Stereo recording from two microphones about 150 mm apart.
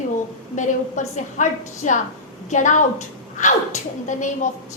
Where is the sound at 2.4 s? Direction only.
55° left (ahead or behind).